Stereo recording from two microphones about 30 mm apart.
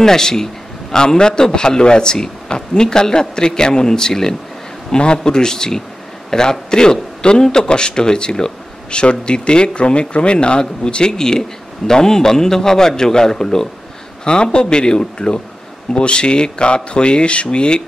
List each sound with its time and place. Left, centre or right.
0.0 s a man's voice: centre
4.9 s a man's voice: left
14.2 s a man's voice: left